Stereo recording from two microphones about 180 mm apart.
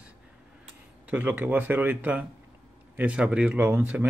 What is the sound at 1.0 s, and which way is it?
Speech, 10° right (ahead or behind).